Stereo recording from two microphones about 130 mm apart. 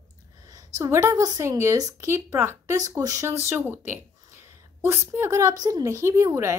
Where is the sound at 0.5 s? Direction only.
25° right (ahead or behind).